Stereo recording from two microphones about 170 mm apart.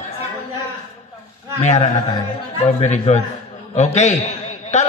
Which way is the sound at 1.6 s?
40° left (ahead or behind).